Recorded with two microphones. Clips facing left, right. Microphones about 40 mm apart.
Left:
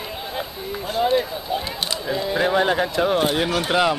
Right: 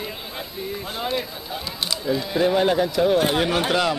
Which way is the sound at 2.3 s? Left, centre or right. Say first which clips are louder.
Even; left.